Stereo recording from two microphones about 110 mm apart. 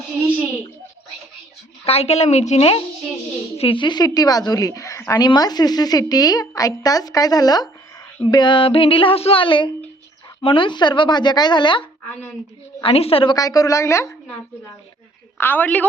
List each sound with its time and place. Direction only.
1.8 s a woman's voice: 65° left (ahead or behind)
3.6 s a woman's voice: 50° left (ahead or behind)
12.8 s a woman's voice: 60° left (ahead or behind)
13.3 s a woman's voice: 35° left (ahead or behind)
15.4 s a woman's voice: 15° left (ahead or behind)